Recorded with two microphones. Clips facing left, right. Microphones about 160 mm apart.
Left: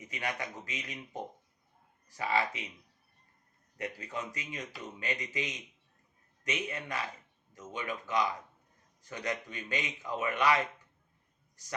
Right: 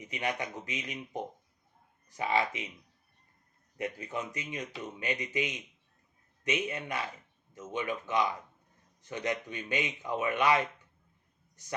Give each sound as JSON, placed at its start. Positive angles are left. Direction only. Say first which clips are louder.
{"t": 0.0, "sound": "speech", "louder": "right 3 dB", "side_deg": -20}
{"t": 3.8, "sound": "speech", "louder": "right 3 dB", "side_deg": -20}